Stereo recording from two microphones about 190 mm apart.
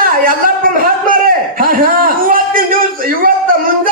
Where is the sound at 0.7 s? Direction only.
50° right (ahead or behind).